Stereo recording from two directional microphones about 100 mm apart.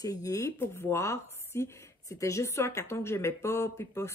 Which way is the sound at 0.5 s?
25° left (ahead or behind).